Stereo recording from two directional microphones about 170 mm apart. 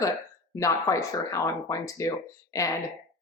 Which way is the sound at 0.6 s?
20° left (ahead or behind).